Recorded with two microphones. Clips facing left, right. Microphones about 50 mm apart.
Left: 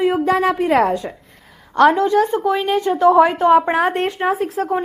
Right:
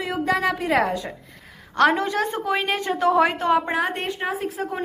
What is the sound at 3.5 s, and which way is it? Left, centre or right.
Speech, left.